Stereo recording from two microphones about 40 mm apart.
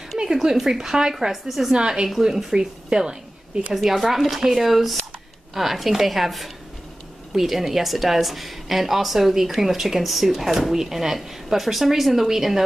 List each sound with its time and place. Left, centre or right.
0.2 s speech: centre
1.2 s speech: centre
1.8 s a woman's voice: right
3.7 s speech: centre